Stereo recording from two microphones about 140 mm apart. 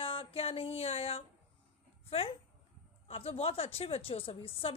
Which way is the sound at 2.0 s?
40° left (ahead or behind).